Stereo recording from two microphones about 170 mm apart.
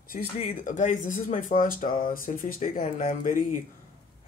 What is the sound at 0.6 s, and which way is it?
Speech, 45° left (ahead or behind).